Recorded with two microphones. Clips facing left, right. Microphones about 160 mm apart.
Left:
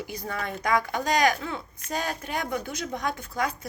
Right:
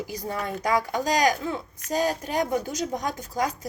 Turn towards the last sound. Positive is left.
turn(degrees=-40)  # may be behind; listen again after turning